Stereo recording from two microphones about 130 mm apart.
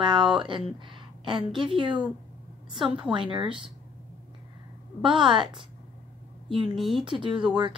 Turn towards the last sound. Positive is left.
turn(degrees=-40)  # may be behind; listen again after turning